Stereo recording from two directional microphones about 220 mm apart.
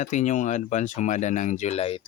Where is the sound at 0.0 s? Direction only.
35° left (ahead or behind).